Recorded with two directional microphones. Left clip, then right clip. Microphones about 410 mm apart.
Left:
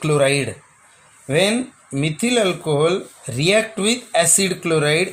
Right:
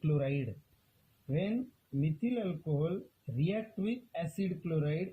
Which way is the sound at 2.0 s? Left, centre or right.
Centre.